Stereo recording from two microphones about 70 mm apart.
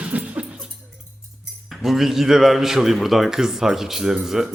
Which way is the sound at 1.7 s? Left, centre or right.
Centre.